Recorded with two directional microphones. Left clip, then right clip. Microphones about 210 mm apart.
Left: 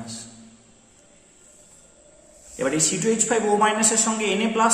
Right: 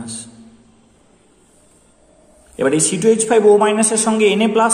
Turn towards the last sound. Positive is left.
turn(degrees=-35)  # may be behind; listen again after turning